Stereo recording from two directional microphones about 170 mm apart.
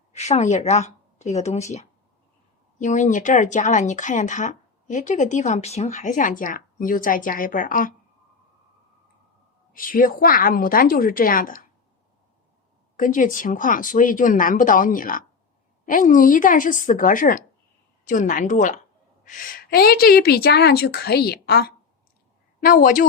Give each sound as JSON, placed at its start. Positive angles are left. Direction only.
{"t": 0.1, "sound": "speech", "side_deg": 40}
{"t": 2.7, "sound": "speech", "side_deg": 45}
{"t": 9.7, "sound": "a woman's voice", "side_deg": 55}
{"t": 13.0, "sound": "a woman's voice", "side_deg": 50}
{"t": 22.6, "sound": "speech", "side_deg": 55}